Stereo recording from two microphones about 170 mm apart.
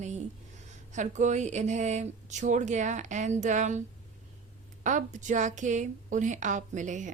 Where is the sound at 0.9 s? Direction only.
45° right (ahead or behind).